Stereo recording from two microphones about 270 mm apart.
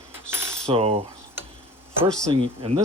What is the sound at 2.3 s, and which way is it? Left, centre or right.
Speech, right.